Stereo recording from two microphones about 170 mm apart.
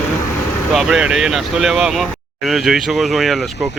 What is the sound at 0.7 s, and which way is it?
Speech, 5° right (ahead or behind).